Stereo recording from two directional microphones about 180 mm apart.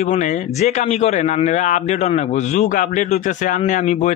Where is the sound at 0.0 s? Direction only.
40° left (ahead or behind).